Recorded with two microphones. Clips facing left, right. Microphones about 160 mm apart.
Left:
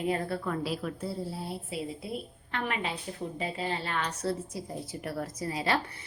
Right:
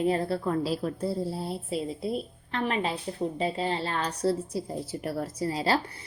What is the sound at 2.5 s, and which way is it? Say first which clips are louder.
A woman's voice: right 4 dB; 35° right (ahead or behind).